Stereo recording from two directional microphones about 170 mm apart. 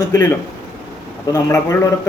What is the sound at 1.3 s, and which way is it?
Speech, 20° left (ahead or behind).